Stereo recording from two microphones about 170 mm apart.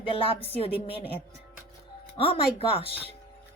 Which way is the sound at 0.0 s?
35° left (ahead or behind).